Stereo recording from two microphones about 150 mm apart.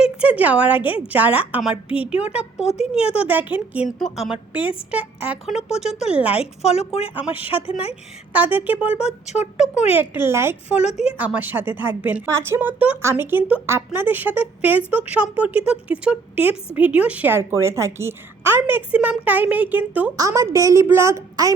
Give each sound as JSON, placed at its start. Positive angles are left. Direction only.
{"t": 0.0, "sound": "a woman's voice", "side_deg": -10}
{"t": 6.7, "sound": "speech", "side_deg": 45}
{"t": 8.3, "sound": "a woman's voice", "side_deg": -10}
{"t": 9.2, "sound": "speech", "side_deg": 50}
{"t": 10.2, "sound": "a woman's voice", "side_deg": -15}
{"t": 20.1, "sound": "a woman's voice", "side_deg": -20}